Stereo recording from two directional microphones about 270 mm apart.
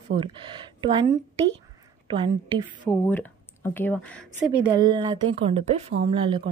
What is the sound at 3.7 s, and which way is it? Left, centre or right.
Speech, centre.